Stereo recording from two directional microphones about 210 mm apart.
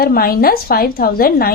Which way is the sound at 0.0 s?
45° left (ahead or behind).